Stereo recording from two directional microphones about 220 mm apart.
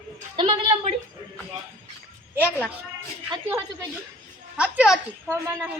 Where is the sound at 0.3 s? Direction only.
20° right (ahead or behind).